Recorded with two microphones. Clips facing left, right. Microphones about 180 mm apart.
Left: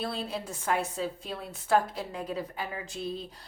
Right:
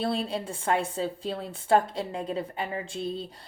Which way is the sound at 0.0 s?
30° right (ahead or behind).